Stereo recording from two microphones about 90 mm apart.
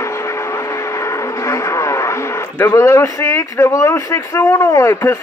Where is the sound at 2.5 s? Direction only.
30° left (ahead or behind).